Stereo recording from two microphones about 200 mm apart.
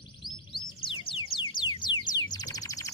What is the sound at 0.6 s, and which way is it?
Music, 25° left (ahead or behind).